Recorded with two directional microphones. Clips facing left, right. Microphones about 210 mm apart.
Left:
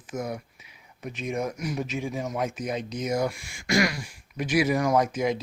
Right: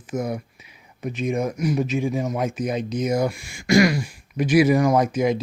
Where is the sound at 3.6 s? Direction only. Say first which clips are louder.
Right 8 dB; 10° right (ahead or behind).